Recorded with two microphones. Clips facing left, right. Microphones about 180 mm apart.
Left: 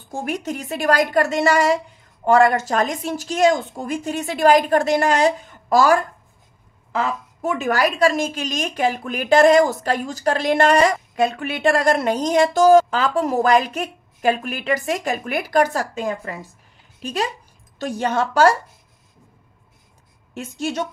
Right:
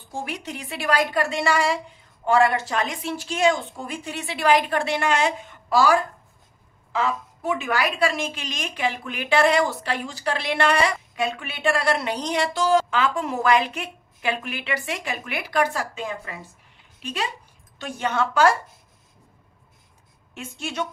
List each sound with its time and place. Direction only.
0.1 s a woman's voice: 45° left (ahead or behind)
20.3 s a woman's voice: 40° left (ahead or behind)